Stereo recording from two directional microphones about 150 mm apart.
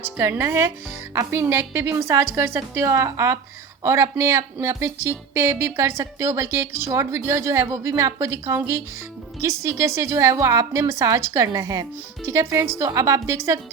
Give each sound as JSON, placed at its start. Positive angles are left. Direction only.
{"t": 0.0, "sound": "a woman's voice", "side_deg": -15}